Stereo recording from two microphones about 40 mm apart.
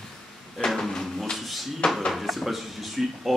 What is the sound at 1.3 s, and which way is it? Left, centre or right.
Drawer open or close, centre.